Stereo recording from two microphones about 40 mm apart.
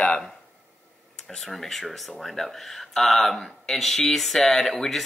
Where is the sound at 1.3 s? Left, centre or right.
Centre.